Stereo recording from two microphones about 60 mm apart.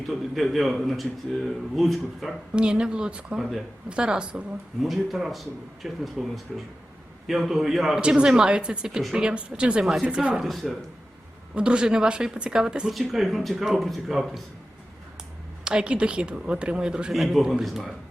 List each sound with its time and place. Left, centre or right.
0.3 s a man's voice: centre
2.6 s speech: centre
4.8 s a man's voice: centre
10.4 s a man's voice: centre
11.5 s speech: centre
12.9 s a man's voice: centre
15.6 s speech: centre
17.1 s a man's voice: centre